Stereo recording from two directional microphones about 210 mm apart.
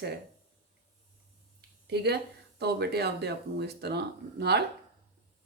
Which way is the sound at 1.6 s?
50° right (ahead or behind).